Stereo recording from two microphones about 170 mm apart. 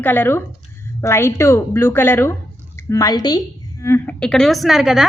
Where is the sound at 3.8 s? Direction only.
10° left (ahead or behind).